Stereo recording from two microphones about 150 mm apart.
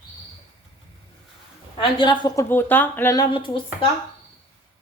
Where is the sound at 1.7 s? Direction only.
30° left (ahead or behind).